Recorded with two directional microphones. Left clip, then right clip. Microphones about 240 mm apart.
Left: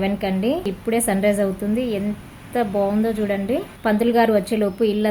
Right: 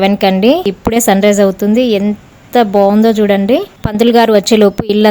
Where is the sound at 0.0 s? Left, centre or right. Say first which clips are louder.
Right 13 dB; right.